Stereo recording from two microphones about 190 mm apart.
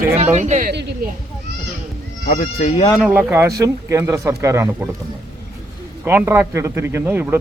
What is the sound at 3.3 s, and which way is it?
Speech, 15° right (ahead or behind).